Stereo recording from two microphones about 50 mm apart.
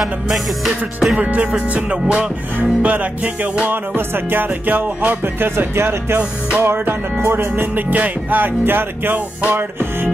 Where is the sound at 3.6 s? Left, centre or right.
Right.